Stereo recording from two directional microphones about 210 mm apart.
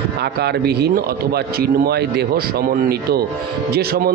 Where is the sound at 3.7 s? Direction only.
45° right (ahead or behind).